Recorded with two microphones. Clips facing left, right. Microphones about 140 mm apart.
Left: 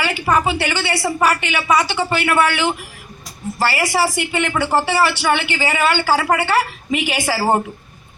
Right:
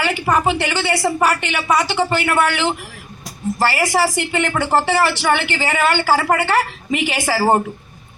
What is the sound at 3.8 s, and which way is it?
A woman's voice, 15° left (ahead or behind).